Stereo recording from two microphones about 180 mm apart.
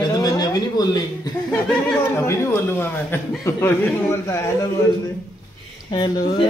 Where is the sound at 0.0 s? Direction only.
20° left (ahead or behind).